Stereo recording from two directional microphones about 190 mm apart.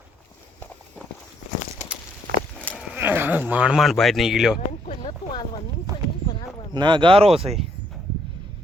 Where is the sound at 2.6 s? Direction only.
5° left (ahead or behind).